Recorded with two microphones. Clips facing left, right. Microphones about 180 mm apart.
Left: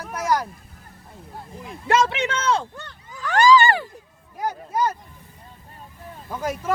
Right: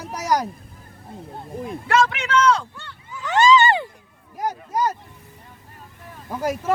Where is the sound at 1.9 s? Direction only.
25° left (ahead or behind).